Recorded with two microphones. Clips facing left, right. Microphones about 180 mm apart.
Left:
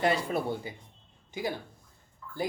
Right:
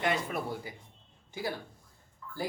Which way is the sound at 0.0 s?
35° left (ahead or behind).